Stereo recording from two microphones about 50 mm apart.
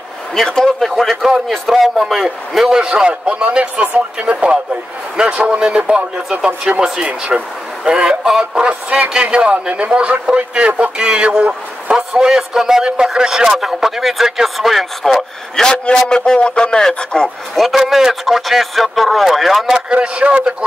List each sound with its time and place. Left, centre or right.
0.4 s a man's voice: centre
15.6 s a man's voice: centre
17.6 s a man's voice: centre
19.9 s a man's voice: right